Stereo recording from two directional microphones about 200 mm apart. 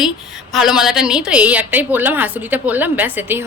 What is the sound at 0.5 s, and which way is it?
A woman's voice, centre (ahead or behind).